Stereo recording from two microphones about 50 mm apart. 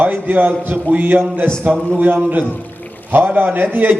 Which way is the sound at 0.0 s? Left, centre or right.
Right.